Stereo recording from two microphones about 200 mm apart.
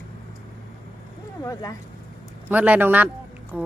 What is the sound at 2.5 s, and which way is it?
Speech, 10° right (ahead or behind).